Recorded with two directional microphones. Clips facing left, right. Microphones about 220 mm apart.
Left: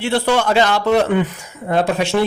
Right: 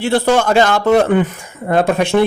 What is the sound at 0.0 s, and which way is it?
A man's voice, 45° right (ahead or behind).